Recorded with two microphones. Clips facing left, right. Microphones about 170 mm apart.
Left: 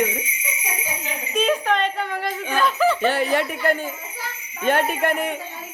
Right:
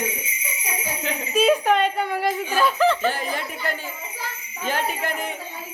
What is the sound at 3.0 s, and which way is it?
A man's voice, 70° left (ahead or behind).